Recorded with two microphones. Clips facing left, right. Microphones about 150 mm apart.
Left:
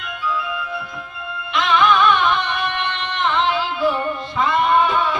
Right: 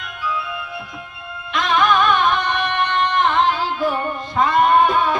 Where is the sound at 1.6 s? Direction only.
45° right (ahead or behind).